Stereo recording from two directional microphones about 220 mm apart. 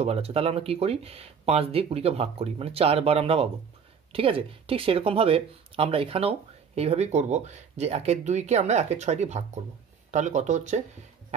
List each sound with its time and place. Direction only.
0.0 s speech: 25° right (ahead or behind)